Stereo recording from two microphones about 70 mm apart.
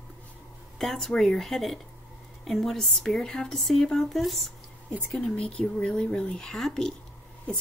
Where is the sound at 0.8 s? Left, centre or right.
Centre.